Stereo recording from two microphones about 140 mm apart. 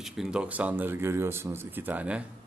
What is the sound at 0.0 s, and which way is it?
Speech, 5° right (ahead or behind).